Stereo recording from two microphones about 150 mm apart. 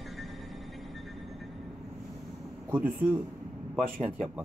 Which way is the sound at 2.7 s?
15° right (ahead or behind).